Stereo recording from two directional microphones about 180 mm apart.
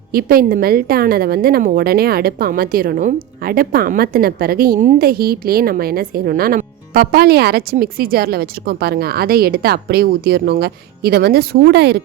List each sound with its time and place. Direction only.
0.1 s a woman's voice: 55° right (ahead or behind)